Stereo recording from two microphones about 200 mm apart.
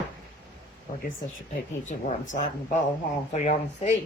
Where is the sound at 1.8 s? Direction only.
40° left (ahead or behind).